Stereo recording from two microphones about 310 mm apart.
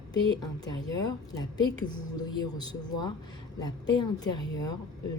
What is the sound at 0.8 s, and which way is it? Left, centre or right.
Speech, centre.